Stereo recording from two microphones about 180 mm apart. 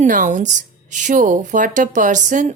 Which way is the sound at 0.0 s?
45° right (ahead or behind).